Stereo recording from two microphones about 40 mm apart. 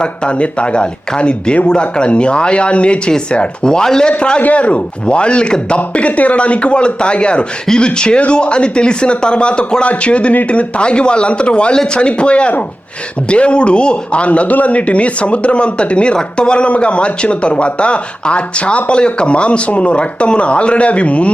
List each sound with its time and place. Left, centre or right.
0.0 s speech: left
4.4 s speech: left